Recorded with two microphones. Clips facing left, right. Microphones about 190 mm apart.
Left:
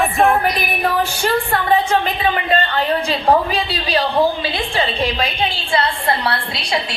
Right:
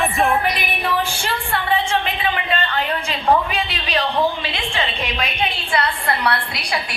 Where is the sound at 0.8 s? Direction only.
40° left (ahead or behind); by 7.0 s 25° left (ahead or behind).